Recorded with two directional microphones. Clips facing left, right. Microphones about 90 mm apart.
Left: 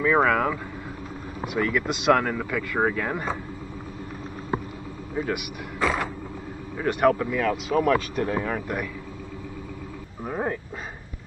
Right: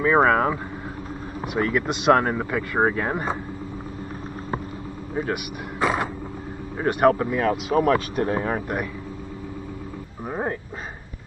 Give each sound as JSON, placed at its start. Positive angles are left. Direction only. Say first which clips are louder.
{"t": 0.0, "sound": "speech", "louder": "right 3 dB", "side_deg": -30}
{"t": 1.6, "sound": "speech", "louder": "right 2 dB", "side_deg": -35}
{"t": 5.2, "sound": "speech", "louder": "right 1 dB", "side_deg": -35}
{"t": 5.8, "sound": "a sound", "louder": "right 2 dB", "side_deg": -15}
{"t": 6.9, "sound": "speech", "louder": "right 2 dB", "side_deg": -40}
{"t": 7.2, "sound": "speech", "louder": "right 2 dB", "side_deg": -30}
{"t": 10.2, "sound": "dog", "louder": "even", "side_deg": -15}